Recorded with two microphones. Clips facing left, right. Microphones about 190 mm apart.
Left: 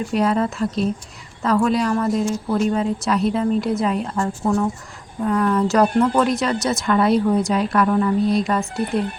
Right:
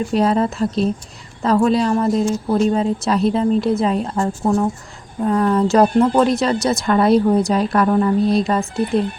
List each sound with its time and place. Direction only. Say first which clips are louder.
0.1 s a woman's voice: right 2 dB; 30° right (ahead or behind)